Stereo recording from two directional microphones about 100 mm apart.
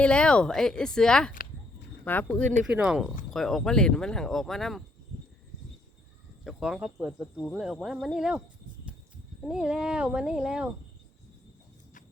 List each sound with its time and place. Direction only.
0.0 s speech: 10° left (ahead or behind)
2.7 s speech: 10° right (ahead or behind)
3.0 s speech: 5° left (ahead or behind)
6.4 s speech: 5° right (ahead or behind)
9.5 s speech: 5° right (ahead or behind)